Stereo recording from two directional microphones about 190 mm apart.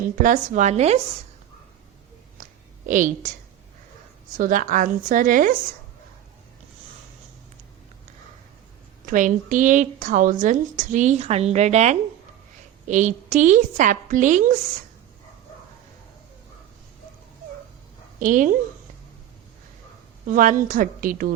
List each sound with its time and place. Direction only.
0.0 s a woman's voice: 45° right (ahead or behind)
2.4 s a sound: 45° right (ahead or behind)
4.4 s speech: 45° right (ahead or behind)
9.0 s a woman's voice: 45° right (ahead or behind)
18.2 s speech: 45° right (ahead or behind)
20.2 s speech: 45° right (ahead or behind)